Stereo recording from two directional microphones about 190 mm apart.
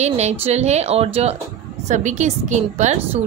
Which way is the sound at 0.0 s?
35° right (ahead or behind).